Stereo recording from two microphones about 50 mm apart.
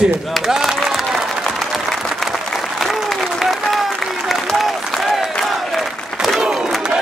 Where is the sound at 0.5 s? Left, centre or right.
Centre.